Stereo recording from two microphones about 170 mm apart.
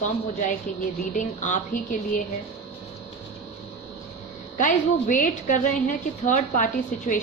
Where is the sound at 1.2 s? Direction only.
45° left (ahead or behind).